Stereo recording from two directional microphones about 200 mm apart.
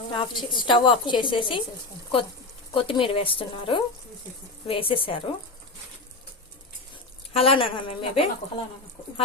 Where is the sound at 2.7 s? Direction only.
25° left (ahead or behind).